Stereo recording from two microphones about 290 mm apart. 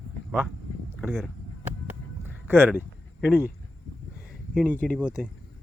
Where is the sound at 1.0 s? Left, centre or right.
Centre.